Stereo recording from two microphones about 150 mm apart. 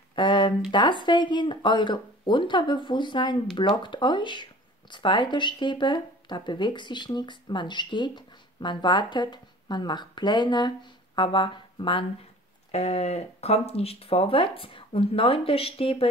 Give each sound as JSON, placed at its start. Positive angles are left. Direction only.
{"t": 0.1, "sound": "a sound", "side_deg": 30}
{"t": 0.7, "sound": "speech", "side_deg": 30}
{"t": 12.7, "sound": "speech", "side_deg": 45}